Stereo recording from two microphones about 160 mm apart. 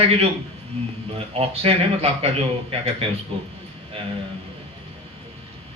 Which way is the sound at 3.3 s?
35° right (ahead or behind).